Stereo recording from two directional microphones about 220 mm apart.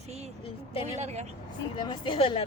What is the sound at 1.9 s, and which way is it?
Speech, 25° left (ahead or behind).